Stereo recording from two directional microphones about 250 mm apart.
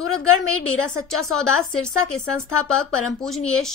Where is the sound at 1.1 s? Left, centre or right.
Centre.